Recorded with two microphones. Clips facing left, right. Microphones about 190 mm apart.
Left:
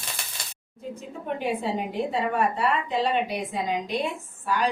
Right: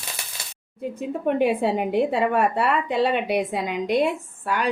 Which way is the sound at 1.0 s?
60° right (ahead or behind).